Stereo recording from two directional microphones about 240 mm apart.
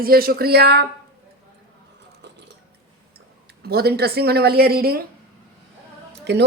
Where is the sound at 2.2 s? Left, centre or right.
Right.